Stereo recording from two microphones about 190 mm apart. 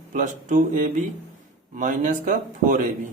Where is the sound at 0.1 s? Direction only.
40° right (ahead or behind).